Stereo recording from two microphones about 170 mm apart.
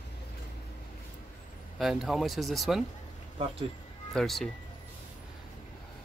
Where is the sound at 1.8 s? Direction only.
Centre (ahead or behind).